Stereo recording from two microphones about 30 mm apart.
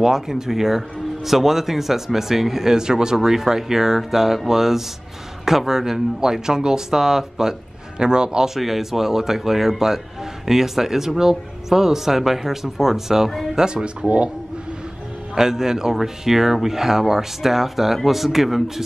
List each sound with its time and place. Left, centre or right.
0.0 s speech: centre
8.0 s speech: right
8.5 s speech: centre
13.6 s speech: right
14.0 s speech: right
15.3 s speech: centre